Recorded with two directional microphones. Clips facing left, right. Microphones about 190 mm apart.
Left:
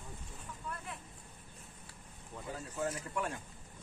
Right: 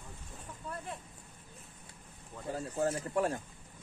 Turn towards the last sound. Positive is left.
turn(degrees=-40)  # may be behind; listen again after turning